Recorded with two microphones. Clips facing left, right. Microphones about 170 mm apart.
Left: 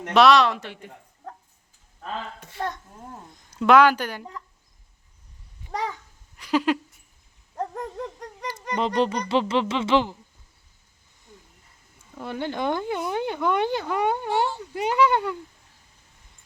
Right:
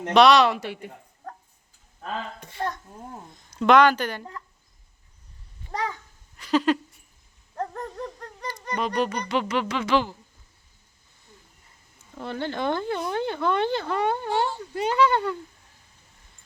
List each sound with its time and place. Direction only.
0.1 s speech: centre (ahead or behind)
2.4 s speech: centre (ahead or behind)
6.3 s a sound: 10° left (ahead or behind)
8.7 s speech: 25° left (ahead or behind)
12.2 s speech: 15° left (ahead or behind)